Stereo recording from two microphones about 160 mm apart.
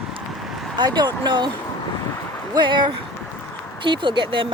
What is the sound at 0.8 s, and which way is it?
Speech, 25° right (ahead or behind).